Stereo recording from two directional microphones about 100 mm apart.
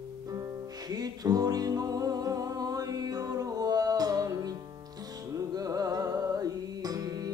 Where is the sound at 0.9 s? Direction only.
40° right (ahead or behind).